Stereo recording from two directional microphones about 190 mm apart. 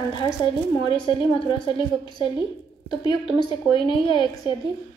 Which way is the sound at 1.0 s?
25° left (ahead or behind).